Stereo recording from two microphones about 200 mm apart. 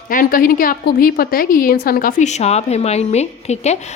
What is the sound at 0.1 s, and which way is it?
Speech, 45° left (ahead or behind).